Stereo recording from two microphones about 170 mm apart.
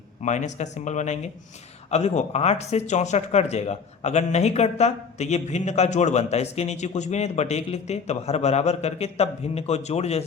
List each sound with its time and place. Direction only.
0.2 s speech: 45° left (ahead or behind)